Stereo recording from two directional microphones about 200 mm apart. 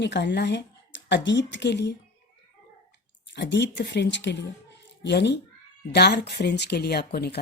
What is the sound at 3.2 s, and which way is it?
Speech, 60° left (ahead or behind).